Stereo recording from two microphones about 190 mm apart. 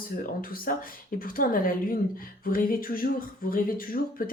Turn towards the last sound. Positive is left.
turn(degrees=50)  # may be behind; listen again after turning